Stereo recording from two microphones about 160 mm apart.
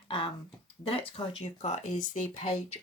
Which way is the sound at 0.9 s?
35° left (ahead or behind).